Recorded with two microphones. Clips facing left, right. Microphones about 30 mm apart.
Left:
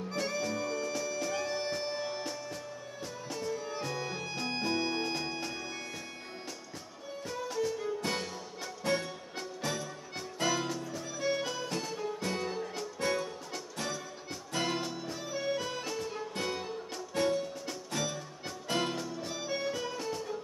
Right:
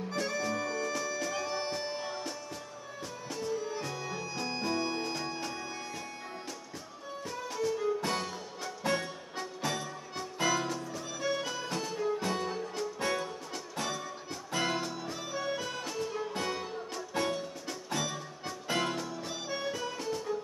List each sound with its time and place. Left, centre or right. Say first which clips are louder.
0.1 s music: right 1 dB; centre
3.5 s music: right 1 dB; centre
7.2 s music: even; centre
9.4 s music: right 2 dB; centre
11.1 s music: left 1 dB; centre
11.6 s music: right 2 dB; centre